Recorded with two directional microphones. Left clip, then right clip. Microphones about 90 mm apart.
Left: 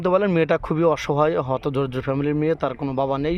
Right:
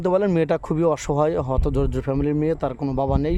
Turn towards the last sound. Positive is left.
turn(degrees=-40)  # may be behind; listen again after turning